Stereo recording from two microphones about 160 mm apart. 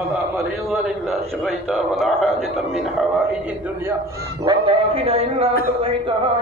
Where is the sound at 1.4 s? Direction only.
Centre (ahead or behind).